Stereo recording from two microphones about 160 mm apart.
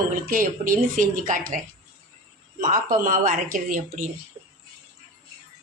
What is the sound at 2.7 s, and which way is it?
A woman's voice, 55° right (ahead or behind).